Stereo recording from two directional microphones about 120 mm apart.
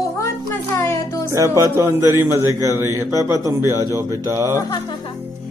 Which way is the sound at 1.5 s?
25° right (ahead or behind).